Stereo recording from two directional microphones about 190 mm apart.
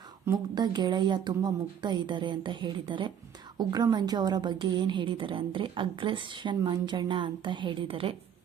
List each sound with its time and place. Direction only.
0.3 s a woman's voice: 20° right (ahead or behind)